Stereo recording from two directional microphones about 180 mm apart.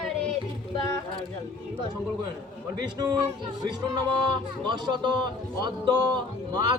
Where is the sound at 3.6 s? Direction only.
25° right (ahead or behind).